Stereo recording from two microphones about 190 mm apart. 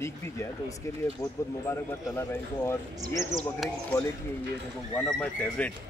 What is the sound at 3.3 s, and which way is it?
Speech, centre (ahead or behind).